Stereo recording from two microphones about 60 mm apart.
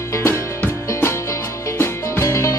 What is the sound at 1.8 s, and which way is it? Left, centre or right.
Music, left.